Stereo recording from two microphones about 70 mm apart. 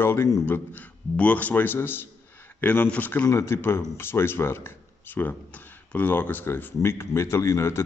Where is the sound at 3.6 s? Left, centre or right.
Left.